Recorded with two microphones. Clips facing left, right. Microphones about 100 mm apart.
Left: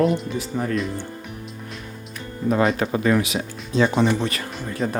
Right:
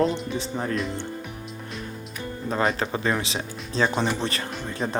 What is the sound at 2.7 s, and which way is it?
Speech, 30° right (ahead or behind).